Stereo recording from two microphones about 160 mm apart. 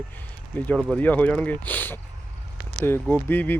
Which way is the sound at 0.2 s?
10° left (ahead or behind).